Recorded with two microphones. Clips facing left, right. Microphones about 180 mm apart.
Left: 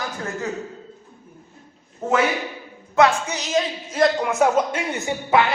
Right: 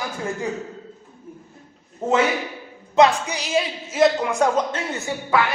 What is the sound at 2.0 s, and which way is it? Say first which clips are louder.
A woman's voice: right 1 dB; 15° right (ahead or behind).